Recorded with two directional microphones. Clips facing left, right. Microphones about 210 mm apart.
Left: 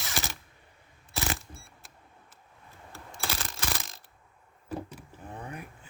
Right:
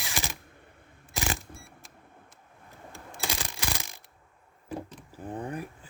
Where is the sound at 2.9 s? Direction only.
15° right (ahead or behind).